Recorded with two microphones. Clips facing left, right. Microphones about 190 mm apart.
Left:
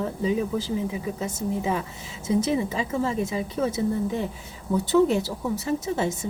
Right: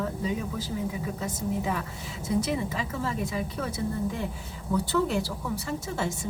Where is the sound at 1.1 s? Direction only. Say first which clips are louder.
Left 2 dB; 25° left (ahead or behind).